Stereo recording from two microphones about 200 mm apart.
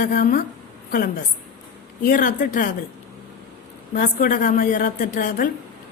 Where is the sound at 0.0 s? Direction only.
45° left (ahead or behind).